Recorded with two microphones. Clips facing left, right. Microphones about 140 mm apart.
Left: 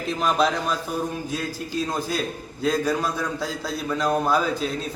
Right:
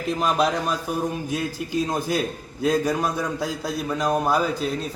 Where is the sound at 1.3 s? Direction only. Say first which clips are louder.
Right 2 dB; 20° right (ahead or behind).